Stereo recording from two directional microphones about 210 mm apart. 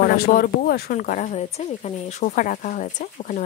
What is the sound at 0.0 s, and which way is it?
Speech, 45° left (ahead or behind).